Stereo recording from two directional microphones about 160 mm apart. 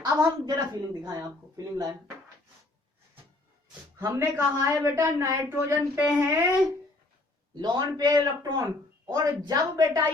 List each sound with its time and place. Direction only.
0.0 s a woman's voice: 25° right (ahead or behind)
3.9 s a woman's voice: 15° right (ahead or behind)
7.5 s a woman's voice: 25° right (ahead or behind)